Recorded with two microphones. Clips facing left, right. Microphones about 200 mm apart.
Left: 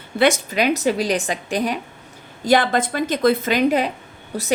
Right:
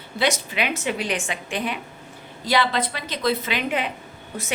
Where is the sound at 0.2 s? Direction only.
45° left (ahead or behind).